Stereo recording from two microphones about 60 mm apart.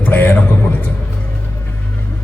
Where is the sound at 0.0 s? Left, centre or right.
Left.